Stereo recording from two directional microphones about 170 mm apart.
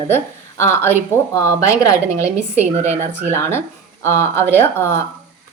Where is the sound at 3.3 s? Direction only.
15° left (ahead or behind).